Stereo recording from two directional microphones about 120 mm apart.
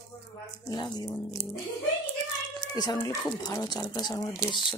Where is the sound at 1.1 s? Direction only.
20° left (ahead or behind).